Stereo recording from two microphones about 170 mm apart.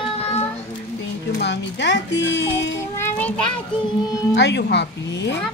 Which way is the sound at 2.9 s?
10° left (ahead or behind).